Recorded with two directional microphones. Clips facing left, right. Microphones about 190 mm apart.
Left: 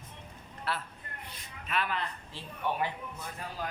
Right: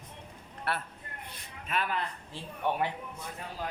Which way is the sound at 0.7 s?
60° right (ahead or behind).